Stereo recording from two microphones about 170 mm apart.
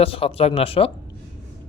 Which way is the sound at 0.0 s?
35° left (ahead or behind).